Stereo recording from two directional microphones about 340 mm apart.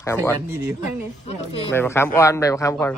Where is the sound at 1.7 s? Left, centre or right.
Centre.